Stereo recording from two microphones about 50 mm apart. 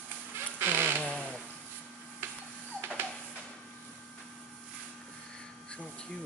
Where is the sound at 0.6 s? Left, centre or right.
Right.